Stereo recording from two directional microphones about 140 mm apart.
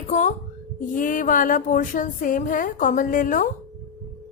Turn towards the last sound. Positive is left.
turn(degrees=75)  # may be behind; listen again after turning